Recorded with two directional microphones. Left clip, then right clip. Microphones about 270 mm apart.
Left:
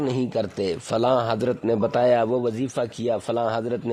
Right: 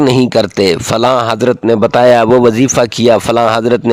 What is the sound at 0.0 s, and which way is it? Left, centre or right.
A man's voice, right.